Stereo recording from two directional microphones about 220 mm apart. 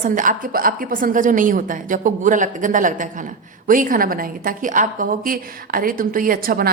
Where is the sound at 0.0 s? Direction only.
35° right (ahead or behind).